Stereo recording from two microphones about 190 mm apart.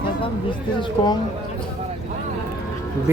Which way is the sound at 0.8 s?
25° left (ahead or behind).